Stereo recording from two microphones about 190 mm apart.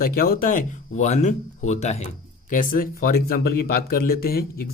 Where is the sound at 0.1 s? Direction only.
50° left (ahead or behind).